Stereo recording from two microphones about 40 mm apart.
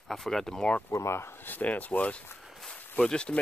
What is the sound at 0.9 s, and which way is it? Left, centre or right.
Speech, left.